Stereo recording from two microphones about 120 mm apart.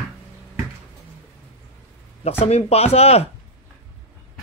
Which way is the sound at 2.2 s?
60° left (ahead or behind).